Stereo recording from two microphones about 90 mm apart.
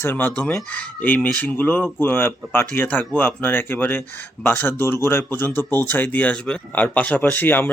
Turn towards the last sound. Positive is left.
turn(degrees=20)  # may be behind; listen again after turning